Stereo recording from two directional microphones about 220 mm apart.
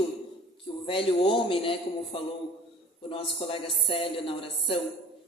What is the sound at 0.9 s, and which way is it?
Speech, 25° left (ahead or behind).